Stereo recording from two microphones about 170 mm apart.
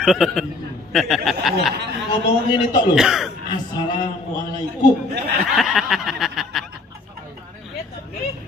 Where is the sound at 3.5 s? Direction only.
25° left (ahead or behind).